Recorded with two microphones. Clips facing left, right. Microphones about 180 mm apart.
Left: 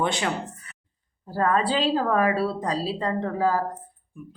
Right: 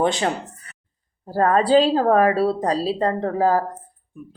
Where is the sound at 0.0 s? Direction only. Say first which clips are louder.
Right 5 dB; 40° right (ahead or behind).